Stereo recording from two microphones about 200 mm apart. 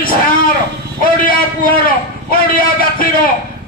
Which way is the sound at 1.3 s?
45° left (ahead or behind).